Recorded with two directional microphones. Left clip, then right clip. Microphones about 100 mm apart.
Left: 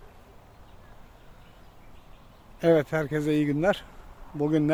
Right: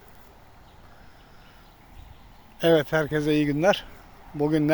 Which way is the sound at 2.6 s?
5° left (ahead or behind).